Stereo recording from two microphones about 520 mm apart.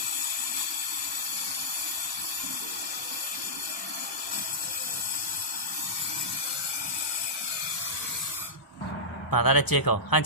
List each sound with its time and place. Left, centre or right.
9.3 s speech: left